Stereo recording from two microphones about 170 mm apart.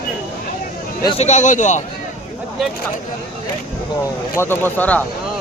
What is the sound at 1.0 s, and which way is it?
Speech, 40° left (ahead or behind).